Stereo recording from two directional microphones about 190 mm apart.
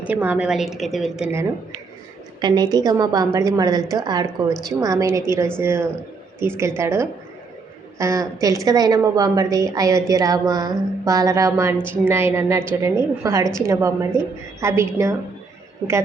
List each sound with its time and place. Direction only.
0.0 s a woman's voice: 10° right (ahead or behind)
2.4 s a woman's voice: 20° right (ahead or behind)